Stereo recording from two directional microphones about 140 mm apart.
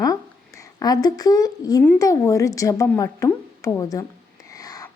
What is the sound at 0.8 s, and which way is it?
Speech, 30° left (ahead or behind).